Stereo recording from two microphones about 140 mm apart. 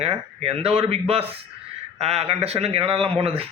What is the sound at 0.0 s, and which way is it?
Speech, 45° right (ahead or behind).